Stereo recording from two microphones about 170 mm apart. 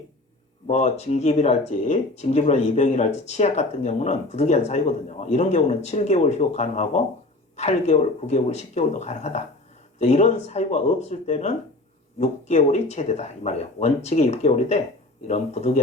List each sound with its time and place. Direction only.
0.7 s speech: 40° left (ahead or behind)